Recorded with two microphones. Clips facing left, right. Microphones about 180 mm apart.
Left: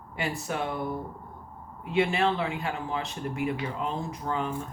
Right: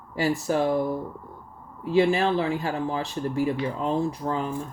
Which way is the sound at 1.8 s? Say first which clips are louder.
Right 4 dB; 35° right (ahead or behind).